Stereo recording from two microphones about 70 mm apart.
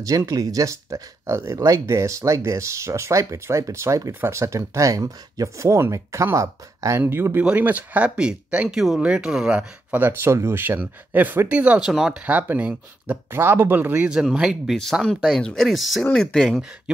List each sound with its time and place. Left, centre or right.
0.0 s speech: right
7.0 s speech: right; by 9.7 s centre
9.8 s speech: right
11.8 s speech: centre
12.3 s speech: right
13.3 s speech: right
14.3 s speech: centre
15.4 s speech: centre